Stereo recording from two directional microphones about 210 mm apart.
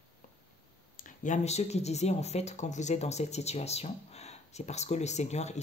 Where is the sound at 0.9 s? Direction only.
40° left (ahead or behind).